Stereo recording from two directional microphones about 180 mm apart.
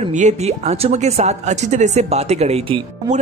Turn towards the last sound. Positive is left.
turn(degrees=-30)  # may be behind; listen again after turning